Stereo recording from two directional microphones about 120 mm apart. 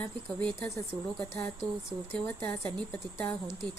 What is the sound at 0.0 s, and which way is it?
Speech, 10° left (ahead or behind).